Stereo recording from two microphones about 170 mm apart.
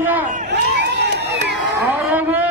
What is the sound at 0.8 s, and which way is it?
Crowd, 90° right.